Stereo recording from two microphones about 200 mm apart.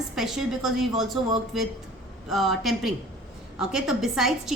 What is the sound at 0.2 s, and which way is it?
A woman's voice, centre (ahead or behind).